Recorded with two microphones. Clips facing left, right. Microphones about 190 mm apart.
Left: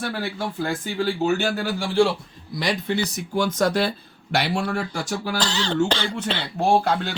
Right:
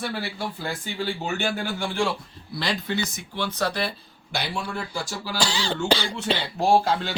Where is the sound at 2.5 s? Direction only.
15° left (ahead or behind).